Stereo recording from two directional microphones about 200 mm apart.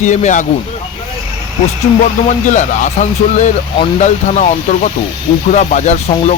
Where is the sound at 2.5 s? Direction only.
40° left (ahead or behind).